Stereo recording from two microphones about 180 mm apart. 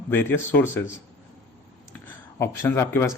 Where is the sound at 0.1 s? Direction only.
10° left (ahead or behind).